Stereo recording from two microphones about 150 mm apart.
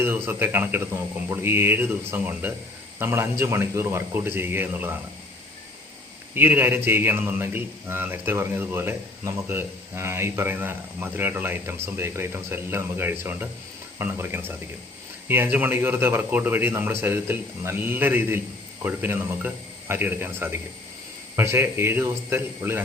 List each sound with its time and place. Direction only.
0.0 s a man's voice: 15° right (ahead or behind)
6.3 s a man's voice: 15° right (ahead or behind)